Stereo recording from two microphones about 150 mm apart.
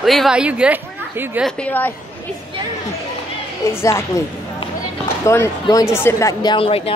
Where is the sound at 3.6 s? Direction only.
20° left (ahead or behind).